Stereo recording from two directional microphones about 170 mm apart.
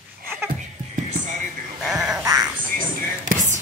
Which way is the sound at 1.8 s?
5° right (ahead or behind).